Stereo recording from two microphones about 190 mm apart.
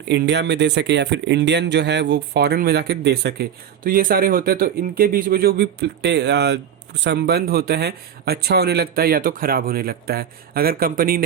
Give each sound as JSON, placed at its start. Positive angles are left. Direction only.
{"t": 0.1, "sound": "a man's voice", "side_deg": -65}
{"t": 3.8, "sound": "speech", "side_deg": -50}